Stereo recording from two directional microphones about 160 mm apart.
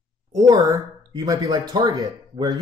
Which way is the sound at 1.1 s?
20° right (ahead or behind).